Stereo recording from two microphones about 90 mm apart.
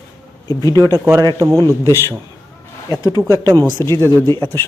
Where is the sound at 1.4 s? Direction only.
40° right (ahead or behind).